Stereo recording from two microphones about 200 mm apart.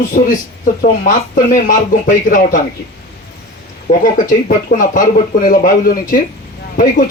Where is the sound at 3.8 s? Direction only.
40° left (ahead or behind).